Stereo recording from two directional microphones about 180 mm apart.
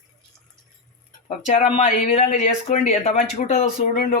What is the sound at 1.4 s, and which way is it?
Speech, 45° left (ahead or behind).